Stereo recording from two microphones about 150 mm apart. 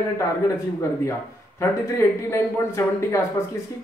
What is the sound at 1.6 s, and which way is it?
Speech, 20° left (ahead or behind).